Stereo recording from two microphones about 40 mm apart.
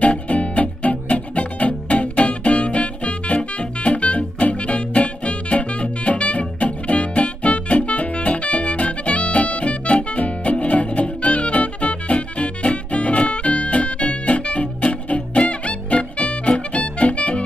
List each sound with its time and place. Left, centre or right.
0.0 s music: left